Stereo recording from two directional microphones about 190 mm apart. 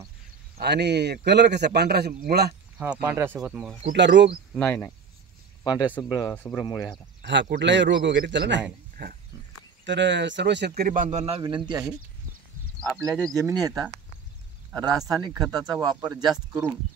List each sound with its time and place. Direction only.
0.6 s speech: 60° right (ahead or behind)
2.8 s speech: 10° right (ahead or behind)
3.9 s a man's voice: 70° right (ahead or behind)
4.6 s speech: 10° left (ahead or behind)
5.6 s speech: 20° left (ahead or behind)
7.2 s a man's voice: 65° right (ahead or behind)
9.0 s speech: 60° right (ahead or behind)
9.8 s a man's voice: 70° right (ahead or behind)
10.8 s speech: 45° right (ahead or behind); by 11.8 s 25° right (ahead or behind)
13.2 s speech: 15° right (ahead or behind)